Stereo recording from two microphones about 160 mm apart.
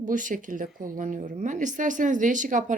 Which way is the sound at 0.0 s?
55° right (ahead or behind).